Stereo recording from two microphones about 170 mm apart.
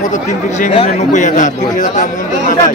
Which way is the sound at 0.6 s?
35° left (ahead or behind).